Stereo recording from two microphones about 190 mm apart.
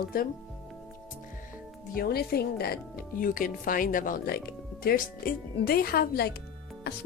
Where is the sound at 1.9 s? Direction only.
55° left (ahead or behind).